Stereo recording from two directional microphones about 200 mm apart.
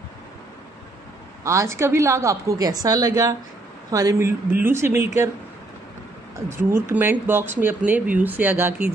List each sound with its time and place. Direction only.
1.4 s a woman's voice: 15° right (ahead or behind)
6.3 s a woman's voice: 10° right (ahead or behind)